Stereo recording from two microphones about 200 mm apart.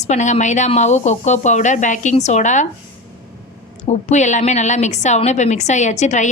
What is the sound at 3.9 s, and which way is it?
A woman's voice, 35° left (ahead or behind).